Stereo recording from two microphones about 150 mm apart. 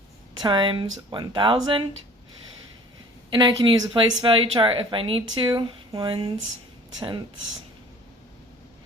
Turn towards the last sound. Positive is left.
turn(degrees=-30)  # may be behind; listen again after turning